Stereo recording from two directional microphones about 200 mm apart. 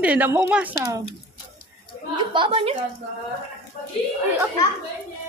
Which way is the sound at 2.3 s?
25° right (ahead or behind).